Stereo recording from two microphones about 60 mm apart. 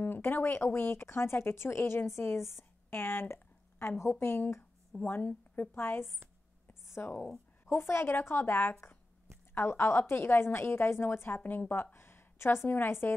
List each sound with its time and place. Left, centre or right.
0.0 s speech: left
5.0 s a woman's voice: left
6.7 s a sound: left
7.6 s a woman's voice: left